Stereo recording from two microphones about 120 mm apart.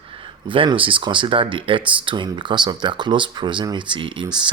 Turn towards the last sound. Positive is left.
turn(degrees=-45)  # may be behind; listen again after turning